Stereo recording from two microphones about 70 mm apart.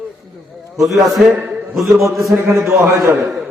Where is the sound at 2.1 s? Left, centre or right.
Right.